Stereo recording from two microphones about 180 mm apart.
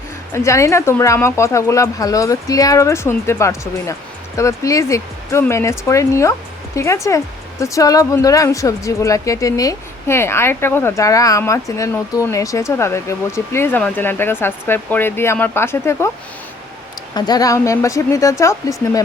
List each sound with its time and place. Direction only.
0.3 s speech: 15° left (ahead or behind)
17.2 s speech: 20° left (ahead or behind)